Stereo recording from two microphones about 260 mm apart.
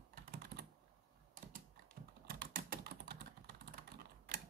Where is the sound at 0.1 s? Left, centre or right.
Right.